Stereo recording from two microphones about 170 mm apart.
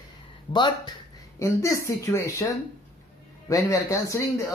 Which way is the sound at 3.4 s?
20° left (ahead or behind).